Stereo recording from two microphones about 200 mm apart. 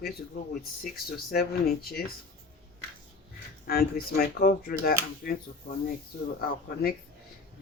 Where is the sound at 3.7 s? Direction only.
50° left (ahead or behind).